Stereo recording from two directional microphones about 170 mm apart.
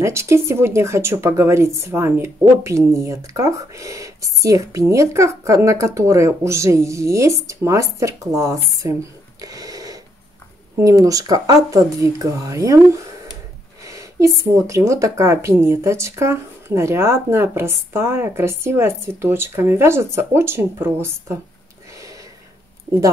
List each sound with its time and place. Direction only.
0.0 s speech: 15° right (ahead or behind)
13.8 s a sound: 20° right (ahead or behind)
14.7 s speech: 15° right (ahead or behind)